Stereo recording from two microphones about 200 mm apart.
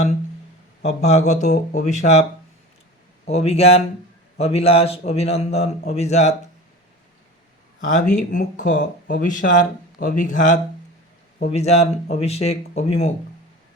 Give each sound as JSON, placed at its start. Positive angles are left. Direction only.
{"t": 0.9, "sound": "speech", "side_deg": 35}
{"t": 3.2, "sound": "speech", "side_deg": 30}
{"t": 7.9, "sound": "speech", "side_deg": 40}